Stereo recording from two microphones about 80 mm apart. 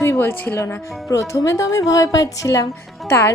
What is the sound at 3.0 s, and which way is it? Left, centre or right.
Speech, left.